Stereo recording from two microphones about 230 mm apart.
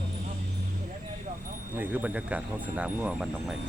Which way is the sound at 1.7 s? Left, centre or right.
Centre.